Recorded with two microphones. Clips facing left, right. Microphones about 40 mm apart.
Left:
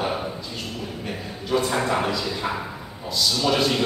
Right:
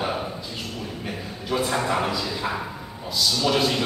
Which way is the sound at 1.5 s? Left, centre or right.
Centre.